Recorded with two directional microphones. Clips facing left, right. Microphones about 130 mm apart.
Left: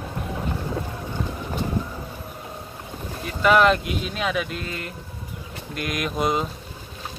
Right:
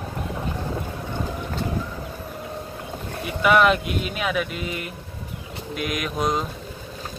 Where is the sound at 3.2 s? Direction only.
5° right (ahead or behind).